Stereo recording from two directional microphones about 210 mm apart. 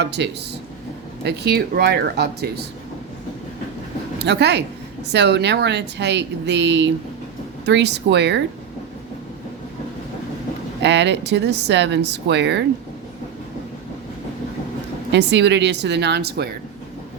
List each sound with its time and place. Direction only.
0.0 s speech: 55° right (ahead or behind)
4.2 s speech: 55° right (ahead or behind)
10.8 s speech: 55° right (ahead or behind)
15.1 s speech: 55° right (ahead or behind)